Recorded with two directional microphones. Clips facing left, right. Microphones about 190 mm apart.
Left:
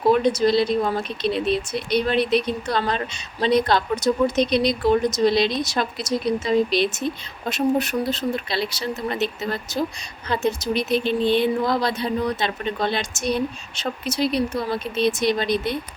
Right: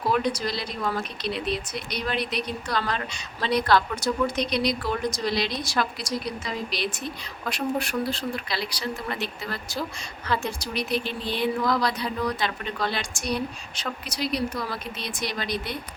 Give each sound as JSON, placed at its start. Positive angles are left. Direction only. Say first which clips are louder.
{"t": 0.0, "sound": "speech", "louder": "left 8 dB", "side_deg": 25}